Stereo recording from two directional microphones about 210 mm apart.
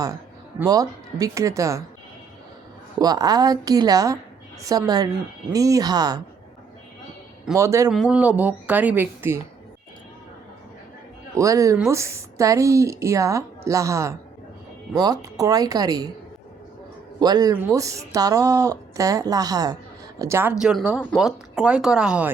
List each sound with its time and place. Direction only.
0.6 s speech: 15° right (ahead or behind)
3.0 s speech: 20° right (ahead or behind)
7.5 s speech: 15° right (ahead or behind)
7.9 s speech: centre (ahead or behind)
11.3 s speech: 15° right (ahead or behind)
17.2 s speech: 20° right (ahead or behind)